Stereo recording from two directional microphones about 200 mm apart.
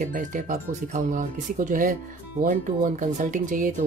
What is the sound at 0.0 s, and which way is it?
Speech, 40° right (ahead or behind).